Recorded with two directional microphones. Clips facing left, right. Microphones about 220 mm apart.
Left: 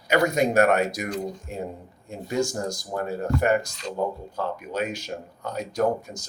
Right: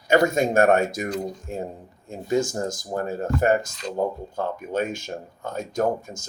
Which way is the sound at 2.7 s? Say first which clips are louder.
Right 1 dB; 50° right (ahead or behind).